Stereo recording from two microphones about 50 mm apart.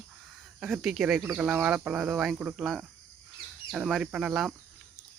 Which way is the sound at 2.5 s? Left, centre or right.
Centre.